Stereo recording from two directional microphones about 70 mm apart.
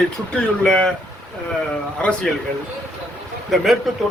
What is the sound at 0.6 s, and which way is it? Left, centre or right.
Speech, centre.